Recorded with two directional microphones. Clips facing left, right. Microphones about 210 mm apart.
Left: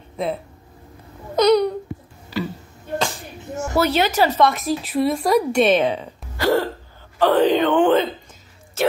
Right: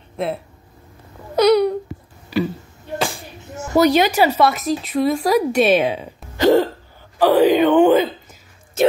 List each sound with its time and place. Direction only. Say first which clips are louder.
1.3 s wail: right 2 dB; 10° right (ahead or behind)
2.3 s tick: right 5 dB; 15° right (ahead or behind)
3.0 s music: right 2 dB; 10° right (ahead or behind)
3.7 s speech: right 5 dB; 15° right (ahead or behind)
6.3 s hiccup: right 5 dB; 20° right (ahead or behind)
7.2 s speech: right 3 dB; 10° right (ahead or behind)